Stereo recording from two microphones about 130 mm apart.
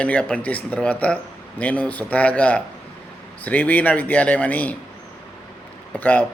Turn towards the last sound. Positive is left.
turn(degrees=10)  # may be behind; listen again after turning